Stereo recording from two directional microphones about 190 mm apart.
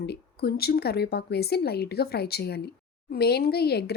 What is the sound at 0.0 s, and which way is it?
Speech, 55° left (ahead or behind).